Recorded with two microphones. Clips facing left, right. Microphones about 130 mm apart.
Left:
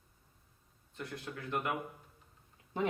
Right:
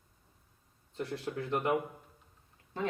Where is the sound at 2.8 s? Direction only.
15° left (ahead or behind).